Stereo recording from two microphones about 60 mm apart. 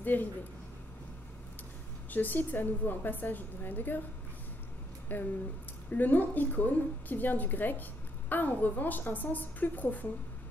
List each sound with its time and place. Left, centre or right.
0.0 s speech: left
2.0 s a woman's voice: left
5.1 s a woman's voice: left